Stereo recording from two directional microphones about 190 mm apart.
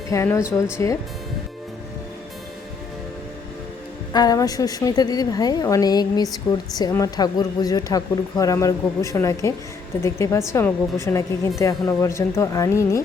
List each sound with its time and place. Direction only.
0.1 s a woman's voice: 15° left (ahead or behind)
4.1 s a woman's voice: 20° left (ahead or behind)